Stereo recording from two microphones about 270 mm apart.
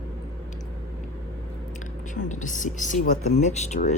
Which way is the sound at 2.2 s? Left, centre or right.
Left.